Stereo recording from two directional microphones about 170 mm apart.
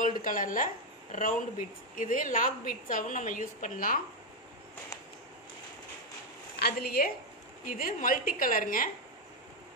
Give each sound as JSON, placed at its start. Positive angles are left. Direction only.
{"t": 0.0, "sound": "a woman's voice", "side_deg": 50}
{"t": 6.6, "sound": "a woman's voice", "side_deg": 65}
{"t": 7.7, "sound": "a woman's voice", "side_deg": 55}